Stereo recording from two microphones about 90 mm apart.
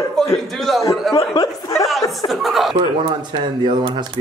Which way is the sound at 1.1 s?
40° left (ahead or behind).